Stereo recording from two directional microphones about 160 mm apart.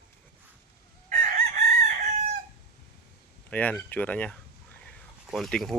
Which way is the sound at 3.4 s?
10° left (ahead or behind).